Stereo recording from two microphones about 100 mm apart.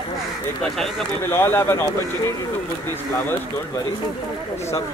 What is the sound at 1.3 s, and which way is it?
Speech, 25° left (ahead or behind).